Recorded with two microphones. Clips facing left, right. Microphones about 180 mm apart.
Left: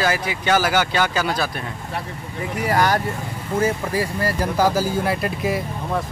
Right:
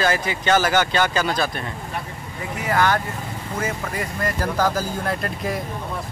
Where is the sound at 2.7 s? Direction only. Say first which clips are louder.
Left 1 dB; 35° left (ahead or behind).